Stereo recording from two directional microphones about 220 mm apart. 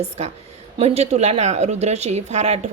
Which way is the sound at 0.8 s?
30° right (ahead or behind).